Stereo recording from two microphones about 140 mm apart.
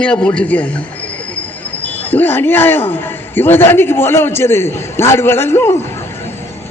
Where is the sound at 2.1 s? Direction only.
15° left (ahead or behind).